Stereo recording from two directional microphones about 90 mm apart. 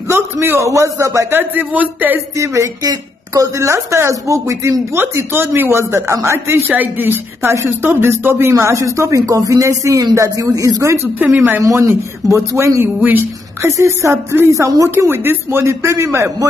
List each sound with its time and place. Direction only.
0.1 s a woman's voice: 30° right (ahead or behind)
1.3 s speech: 20° right (ahead or behind)
2.3 s a woman's voice: 35° right (ahead or behind)
11.1 s speech: 20° right (ahead or behind)
11.6 s speech: 35° right (ahead or behind)
13.6 s a woman's voice: 35° right (ahead or behind)
15.0 s a woman's voice: 25° right (ahead or behind)